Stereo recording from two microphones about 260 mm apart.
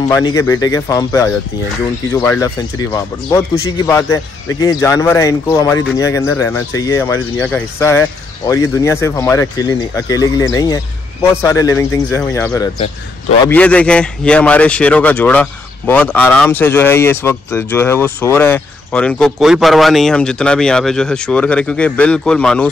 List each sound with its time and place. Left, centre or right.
0.1 s speech: centre